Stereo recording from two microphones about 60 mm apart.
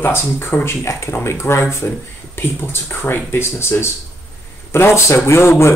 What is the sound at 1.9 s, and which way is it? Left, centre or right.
Speech, left.